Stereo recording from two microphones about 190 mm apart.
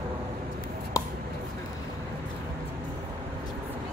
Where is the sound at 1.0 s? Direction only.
20° left (ahead or behind).